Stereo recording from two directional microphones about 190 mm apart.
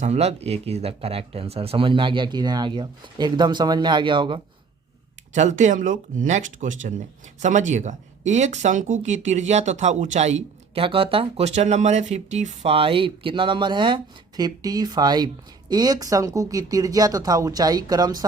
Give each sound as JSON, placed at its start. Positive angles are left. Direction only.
{"t": 0.0, "sound": "speech", "side_deg": -35}
{"t": 5.3, "sound": "speech", "side_deg": -40}